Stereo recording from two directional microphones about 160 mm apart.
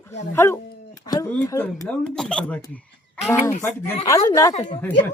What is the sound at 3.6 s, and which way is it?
Speech, 15° left (ahead or behind).